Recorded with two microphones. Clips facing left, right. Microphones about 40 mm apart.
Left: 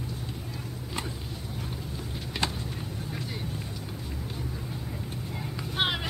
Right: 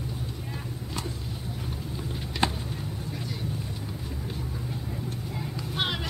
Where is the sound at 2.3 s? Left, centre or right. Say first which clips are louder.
Right 4 dB; centre.